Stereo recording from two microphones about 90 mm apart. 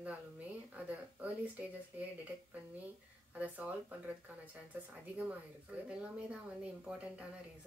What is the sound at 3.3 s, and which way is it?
Speech, 15° right (ahead or behind).